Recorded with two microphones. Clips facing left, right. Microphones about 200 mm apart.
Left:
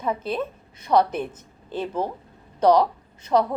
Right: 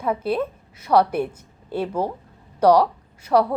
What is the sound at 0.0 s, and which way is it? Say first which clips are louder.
Speech: right 3 dB; 10° right (ahead or behind).